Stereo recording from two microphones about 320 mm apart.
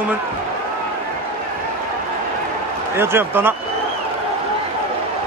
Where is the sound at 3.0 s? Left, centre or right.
Centre.